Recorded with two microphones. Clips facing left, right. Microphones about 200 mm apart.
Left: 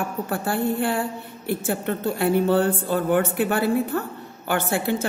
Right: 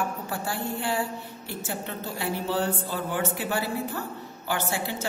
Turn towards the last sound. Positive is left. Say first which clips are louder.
# left 5 dB
turn(degrees=55)  # may be behind; listen again after turning